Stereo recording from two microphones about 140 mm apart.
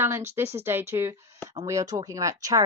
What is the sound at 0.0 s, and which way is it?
A woman's voice, 20° right (ahead or behind).